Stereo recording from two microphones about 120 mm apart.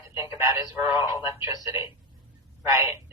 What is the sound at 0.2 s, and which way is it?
Speech, 25° right (ahead or behind).